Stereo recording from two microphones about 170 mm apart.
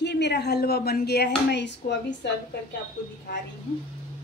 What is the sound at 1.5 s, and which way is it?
Speech, 90° left.